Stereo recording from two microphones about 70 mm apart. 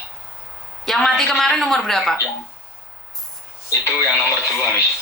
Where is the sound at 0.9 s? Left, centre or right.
Centre.